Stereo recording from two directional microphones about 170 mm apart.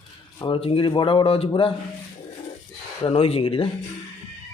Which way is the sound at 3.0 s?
35° left (ahead or behind).